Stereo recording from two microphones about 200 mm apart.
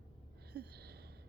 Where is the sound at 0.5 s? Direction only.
55° right (ahead or behind).